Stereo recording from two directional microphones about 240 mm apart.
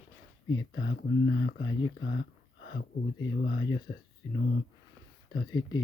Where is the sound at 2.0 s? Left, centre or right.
Left.